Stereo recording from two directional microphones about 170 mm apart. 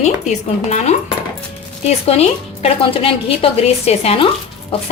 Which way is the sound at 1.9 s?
40° left (ahead or behind).